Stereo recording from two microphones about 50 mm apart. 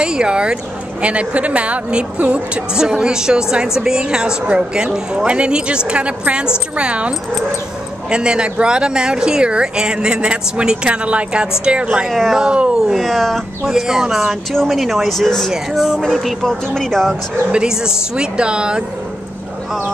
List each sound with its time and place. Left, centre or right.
0.0 s a woman's voice: centre
12.1 s speech: centre
12.4 s speech: centre
12.9 s speech: centre
13.7 s speech: centre
15.5 s speech: centre
17.5 s a woman's voice: centre